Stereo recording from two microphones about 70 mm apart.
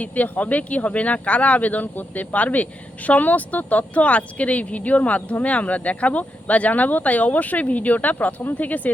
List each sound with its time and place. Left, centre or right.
0.0 s speech: left